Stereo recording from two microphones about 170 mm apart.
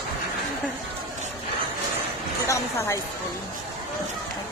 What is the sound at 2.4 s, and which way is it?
Speech, 15° left (ahead or behind).